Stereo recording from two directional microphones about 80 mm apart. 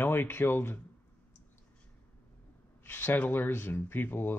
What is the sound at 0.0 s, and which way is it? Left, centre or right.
Speech, left.